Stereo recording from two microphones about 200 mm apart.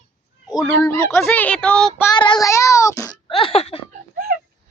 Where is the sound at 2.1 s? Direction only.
20° left (ahead or behind).